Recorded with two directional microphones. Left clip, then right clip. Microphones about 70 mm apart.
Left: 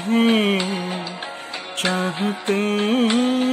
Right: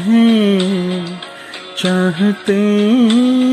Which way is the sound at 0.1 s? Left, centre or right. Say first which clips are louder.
Right 5 dB; right.